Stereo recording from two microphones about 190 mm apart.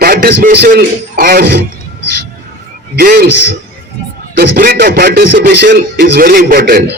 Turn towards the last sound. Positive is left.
turn(degrees=-55)  # may be behind; listen again after turning